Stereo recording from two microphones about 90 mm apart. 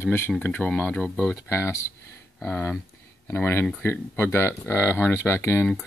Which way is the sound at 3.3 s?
25° left (ahead or behind).